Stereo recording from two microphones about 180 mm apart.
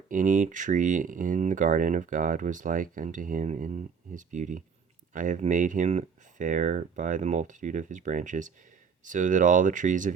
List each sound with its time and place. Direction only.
0.1 s speech: 45° right (ahead or behind)